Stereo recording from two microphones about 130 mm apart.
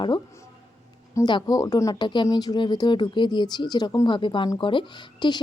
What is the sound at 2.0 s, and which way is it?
Speech, 35° left (ahead or behind).